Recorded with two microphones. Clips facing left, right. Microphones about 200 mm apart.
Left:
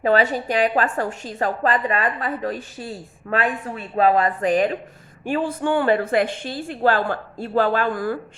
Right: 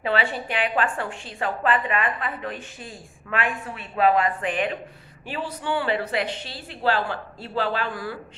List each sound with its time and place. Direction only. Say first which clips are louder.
0.0 s a woman's voice: left 6 dB; 40° left (ahead or behind)
5.2 s a woman's voice: left 8 dB; 50° left (ahead or behind)